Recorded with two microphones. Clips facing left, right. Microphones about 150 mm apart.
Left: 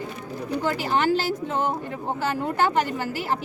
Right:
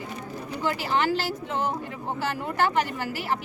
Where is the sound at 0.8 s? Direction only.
50° left (ahead or behind).